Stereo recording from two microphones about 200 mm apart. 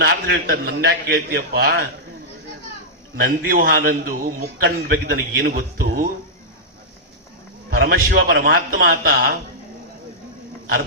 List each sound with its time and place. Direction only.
0.0 s a man's voice: 50° right (ahead or behind)
3.2 s a man's voice: 45° right (ahead or behind)
7.7 s a man's voice: 50° right (ahead or behind)